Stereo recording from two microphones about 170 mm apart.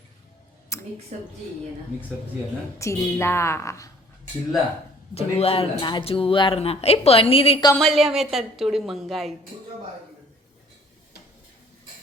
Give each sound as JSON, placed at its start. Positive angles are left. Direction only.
{"t": 0.7, "sound": "a sound", "side_deg": 20}
{"t": 1.1, "sound": "a woman's voice", "side_deg": -45}
{"t": 2.7, "sound": "a woman's voice", "side_deg": 15}
{"t": 5.1, "sound": "speech", "side_deg": 35}
{"t": 7.8, "sound": "a woman's voice", "side_deg": 0}